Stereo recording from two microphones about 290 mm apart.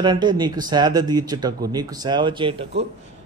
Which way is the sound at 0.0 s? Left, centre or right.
Centre.